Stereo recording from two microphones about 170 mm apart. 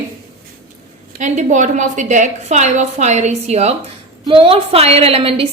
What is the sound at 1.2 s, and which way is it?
A woman's voice, 45° right (ahead or behind).